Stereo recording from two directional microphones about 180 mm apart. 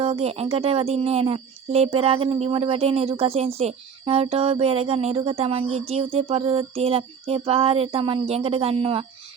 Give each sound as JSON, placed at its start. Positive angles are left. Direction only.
{"t": 0.0, "sound": "speech", "side_deg": -35}